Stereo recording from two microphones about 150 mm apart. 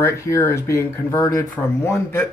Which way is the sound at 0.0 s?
20° left (ahead or behind).